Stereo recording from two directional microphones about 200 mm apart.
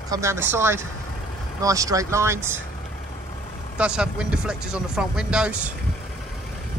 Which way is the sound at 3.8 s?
5° right (ahead or behind).